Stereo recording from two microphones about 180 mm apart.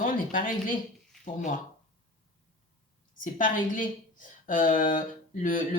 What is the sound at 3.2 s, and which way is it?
Speech, 50° left (ahead or behind).